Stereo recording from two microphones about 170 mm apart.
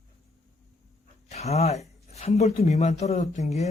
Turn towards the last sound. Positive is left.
turn(degrees=40)  # may be behind; listen again after turning